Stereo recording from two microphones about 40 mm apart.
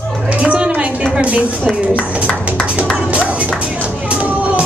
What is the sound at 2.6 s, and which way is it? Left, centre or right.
Music, right.